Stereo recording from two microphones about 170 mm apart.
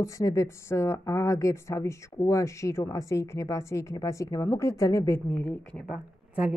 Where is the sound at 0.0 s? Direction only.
20° left (ahead or behind).